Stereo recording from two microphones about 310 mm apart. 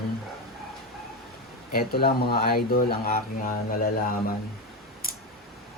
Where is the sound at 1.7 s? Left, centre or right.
Left.